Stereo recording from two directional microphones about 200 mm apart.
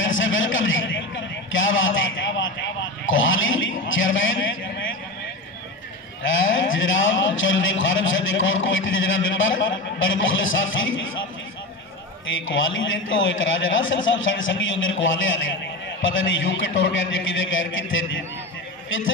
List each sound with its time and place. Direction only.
0.0 s a sound: 75° left (ahead or behind)
1.5 s a man's voice: 75° left (ahead or behind)
6.2 s a man's voice: 70° left (ahead or behind)
12.4 s a man's voice: 75° left (ahead or behind)